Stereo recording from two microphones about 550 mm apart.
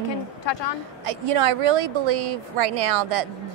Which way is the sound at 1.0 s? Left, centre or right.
Right.